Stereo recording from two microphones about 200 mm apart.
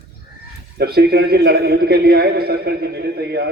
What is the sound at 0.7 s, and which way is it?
A man's voice, 50° right (ahead or behind).